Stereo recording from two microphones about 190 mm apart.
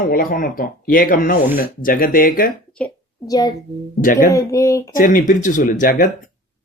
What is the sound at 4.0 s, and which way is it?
Speech, 45° left (ahead or behind).